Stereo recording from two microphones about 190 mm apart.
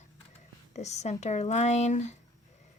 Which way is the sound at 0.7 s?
35° left (ahead or behind).